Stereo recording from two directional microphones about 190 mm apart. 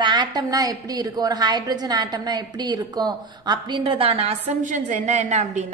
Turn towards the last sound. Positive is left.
turn(degrees=-40)  # may be behind; listen again after turning